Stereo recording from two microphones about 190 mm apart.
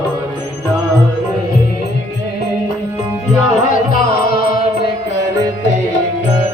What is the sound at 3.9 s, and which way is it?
Music, 50° left (ahead or behind).